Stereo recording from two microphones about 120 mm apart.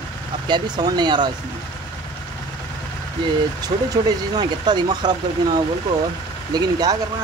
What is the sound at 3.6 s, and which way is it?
Speech, 35° right (ahead or behind).